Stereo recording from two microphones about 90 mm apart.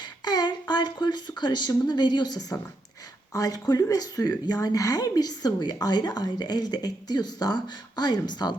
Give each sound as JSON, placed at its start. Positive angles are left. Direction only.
{"t": 0.0, "sound": "child singing", "side_deg": 50}
{"t": 0.7, "sound": "a woman's voice", "side_deg": 55}